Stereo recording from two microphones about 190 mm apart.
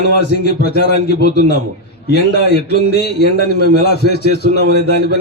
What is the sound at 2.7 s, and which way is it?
A man's voice, 60° left (ahead or behind).